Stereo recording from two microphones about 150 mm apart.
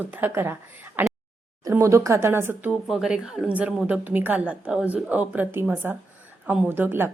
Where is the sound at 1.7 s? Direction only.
20° right (ahead or behind).